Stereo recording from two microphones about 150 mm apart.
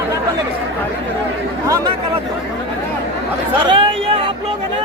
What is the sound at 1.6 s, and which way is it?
Speech, 20° right (ahead or behind).